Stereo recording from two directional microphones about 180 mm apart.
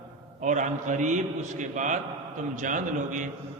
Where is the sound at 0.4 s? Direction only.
45° right (ahead or behind).